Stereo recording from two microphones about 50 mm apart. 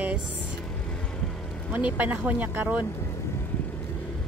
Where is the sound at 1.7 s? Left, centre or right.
Right.